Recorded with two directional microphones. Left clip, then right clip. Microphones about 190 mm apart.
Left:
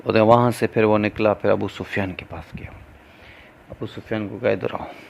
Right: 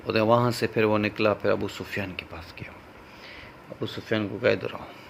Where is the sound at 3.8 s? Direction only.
30° left (ahead or behind).